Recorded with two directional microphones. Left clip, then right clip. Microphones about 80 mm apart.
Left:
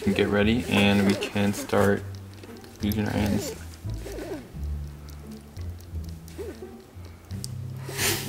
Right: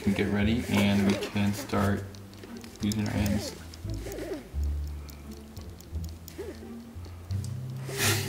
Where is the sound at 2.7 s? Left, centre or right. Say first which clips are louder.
Left 4 dB; right.